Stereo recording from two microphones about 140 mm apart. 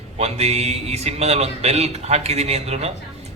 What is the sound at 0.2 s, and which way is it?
Speech, 50° right (ahead or behind).